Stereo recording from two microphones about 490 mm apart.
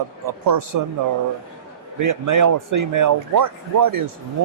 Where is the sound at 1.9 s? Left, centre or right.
Right.